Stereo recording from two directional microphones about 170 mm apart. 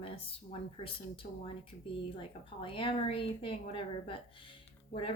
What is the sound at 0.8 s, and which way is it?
Speech, 30° left (ahead or behind).